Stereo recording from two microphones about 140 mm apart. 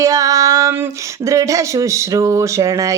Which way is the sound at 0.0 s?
25° right (ahead or behind).